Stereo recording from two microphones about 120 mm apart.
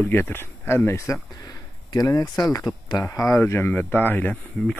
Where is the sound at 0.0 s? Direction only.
20° left (ahead or behind).